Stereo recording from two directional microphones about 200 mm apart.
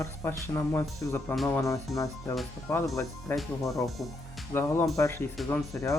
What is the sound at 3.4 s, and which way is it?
Speech, centre (ahead or behind).